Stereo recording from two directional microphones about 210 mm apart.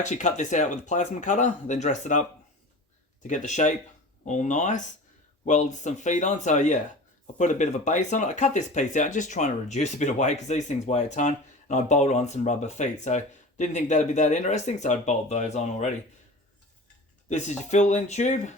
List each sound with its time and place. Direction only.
0.0 s speech: 35° left (ahead or behind)
3.2 s speech: 35° left (ahead or behind)
17.2 s speech: 35° left (ahead or behind)